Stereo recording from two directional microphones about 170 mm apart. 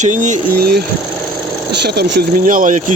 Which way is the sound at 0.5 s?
65° right (ahead or behind).